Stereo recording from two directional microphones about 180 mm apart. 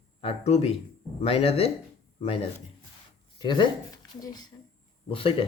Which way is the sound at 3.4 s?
25° left (ahead or behind).